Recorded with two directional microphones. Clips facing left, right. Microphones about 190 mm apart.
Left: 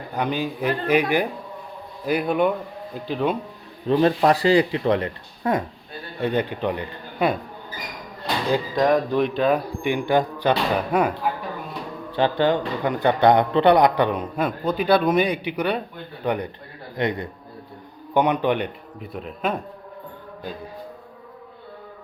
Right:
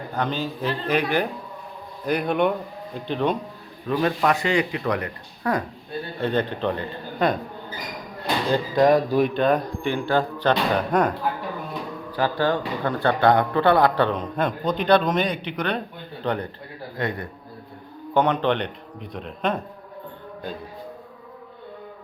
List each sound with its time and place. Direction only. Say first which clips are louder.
0.1 s a man's voice: left 2 dB; 15° left (ahead or behind)
3.8 s speech: left 4 dB; 30° left (ahead or behind)
6.2 s speech: left 1 dB; 10° left (ahead or behind)
8.7 s speech: right 3 dB; 5° right (ahead or behind)
12.1 s speech: left 3 dB; 20° left (ahead or behind); by 19.5 s 5° left (ahead or behind)